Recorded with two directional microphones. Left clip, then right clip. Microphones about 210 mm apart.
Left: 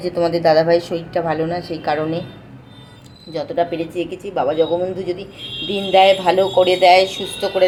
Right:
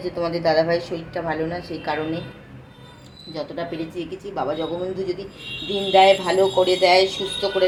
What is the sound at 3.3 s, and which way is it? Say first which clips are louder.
A woman's voice: left 9 dB; 50° left (ahead or behind).